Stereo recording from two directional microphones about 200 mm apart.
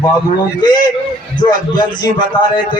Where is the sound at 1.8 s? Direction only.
20° left (ahead or behind).